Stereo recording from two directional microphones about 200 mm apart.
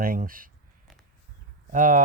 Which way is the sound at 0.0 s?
45° right (ahead or behind).